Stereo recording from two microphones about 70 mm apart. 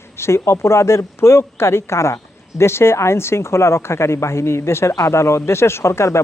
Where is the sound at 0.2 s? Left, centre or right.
Left.